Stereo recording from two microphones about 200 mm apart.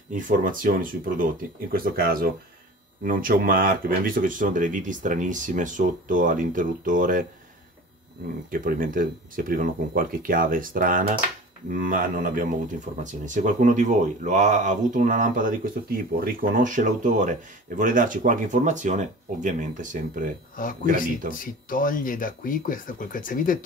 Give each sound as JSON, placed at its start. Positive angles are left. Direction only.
{"t": 0.1, "sound": "speech", "side_deg": -40}
{"t": 8.5, "sound": "speech", "side_deg": -45}
{"t": 21.3, "sound": "speech", "side_deg": 45}